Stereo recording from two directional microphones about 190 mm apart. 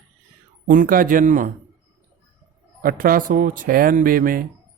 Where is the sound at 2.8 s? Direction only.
50° right (ahead or behind).